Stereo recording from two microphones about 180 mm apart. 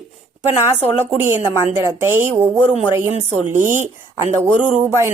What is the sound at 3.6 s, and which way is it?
Speech, 45° right (ahead or behind).